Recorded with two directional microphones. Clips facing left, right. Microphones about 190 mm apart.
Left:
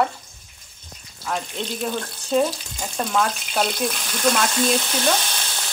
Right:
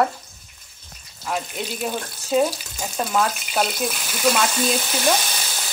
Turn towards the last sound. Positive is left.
turn(degrees=-5)  # may be behind; listen again after turning